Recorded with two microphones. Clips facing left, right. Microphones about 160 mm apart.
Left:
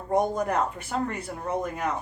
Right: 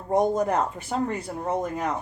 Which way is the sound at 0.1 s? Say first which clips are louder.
Right 3 dB; 25° right (ahead or behind).